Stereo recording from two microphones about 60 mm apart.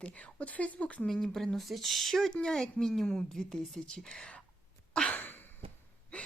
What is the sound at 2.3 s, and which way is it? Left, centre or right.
A woman's voice, centre.